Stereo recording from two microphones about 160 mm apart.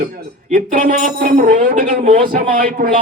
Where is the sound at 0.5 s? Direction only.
55° right (ahead or behind).